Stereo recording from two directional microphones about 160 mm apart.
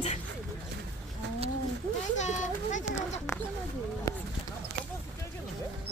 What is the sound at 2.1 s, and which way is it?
A child's voice, 45° left (ahead or behind).